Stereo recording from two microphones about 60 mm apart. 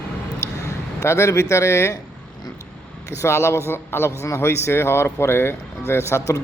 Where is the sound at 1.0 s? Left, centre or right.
Left.